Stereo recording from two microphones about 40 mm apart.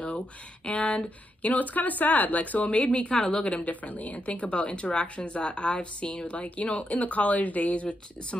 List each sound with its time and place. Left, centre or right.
0.7 s speech: left